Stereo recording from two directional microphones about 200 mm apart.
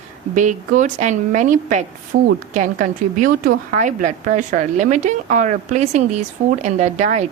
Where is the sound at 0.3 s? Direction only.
40° right (ahead or behind).